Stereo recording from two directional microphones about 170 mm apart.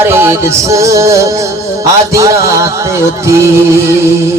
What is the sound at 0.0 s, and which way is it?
Music, 15° right (ahead or behind).